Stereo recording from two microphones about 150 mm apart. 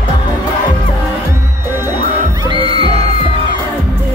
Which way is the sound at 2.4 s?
35° right (ahead or behind).